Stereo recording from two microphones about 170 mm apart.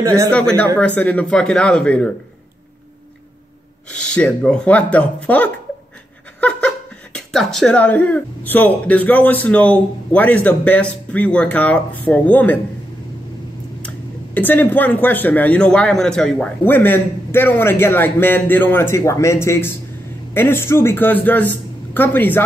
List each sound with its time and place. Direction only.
0.0 s speech: 20° right (ahead or behind)
0.3 s speech: 5° left (ahead or behind)
3.9 s speech: 5° left (ahead or behind)
13.8 s speech: 10° left (ahead or behind)